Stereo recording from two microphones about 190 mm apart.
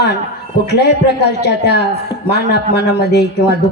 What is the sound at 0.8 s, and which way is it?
Speech, 60° left (ahead or behind).